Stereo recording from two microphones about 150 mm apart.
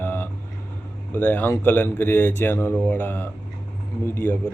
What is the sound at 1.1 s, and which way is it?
Speech, 10° left (ahead or behind).